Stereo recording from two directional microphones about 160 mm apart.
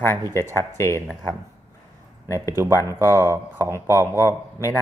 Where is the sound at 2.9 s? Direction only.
15° right (ahead or behind).